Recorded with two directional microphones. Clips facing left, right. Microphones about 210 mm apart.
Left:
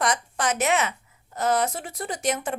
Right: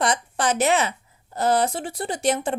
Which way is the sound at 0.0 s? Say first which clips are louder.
Right 2 dB; 30° right (ahead or behind).